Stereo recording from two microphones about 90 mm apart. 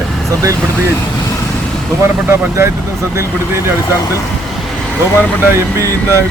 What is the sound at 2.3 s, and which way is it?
Speech, 30° right (ahead or behind).